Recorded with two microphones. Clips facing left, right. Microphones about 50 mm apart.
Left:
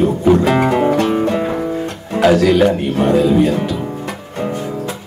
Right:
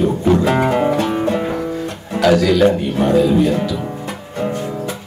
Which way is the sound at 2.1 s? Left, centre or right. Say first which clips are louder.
Left 2 dB; left.